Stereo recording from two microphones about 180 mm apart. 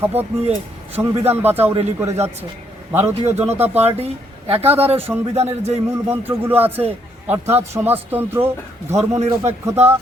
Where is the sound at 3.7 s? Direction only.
35° right (ahead or behind).